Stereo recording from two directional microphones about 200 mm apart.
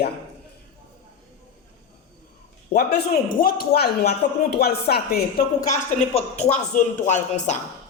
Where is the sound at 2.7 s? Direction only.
50° left (ahead or behind).